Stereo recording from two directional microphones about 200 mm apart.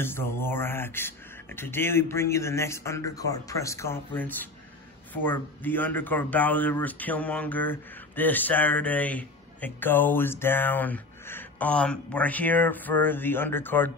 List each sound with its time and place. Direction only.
0.0 s speech: 10° left (ahead or behind)